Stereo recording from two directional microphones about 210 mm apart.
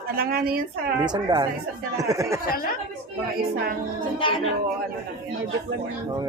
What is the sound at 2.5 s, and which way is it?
Speech, 45° left (ahead or behind).